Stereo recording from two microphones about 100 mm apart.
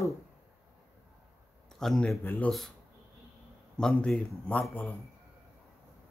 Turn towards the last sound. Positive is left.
turn(degrees=10)  # may be behind; listen again after turning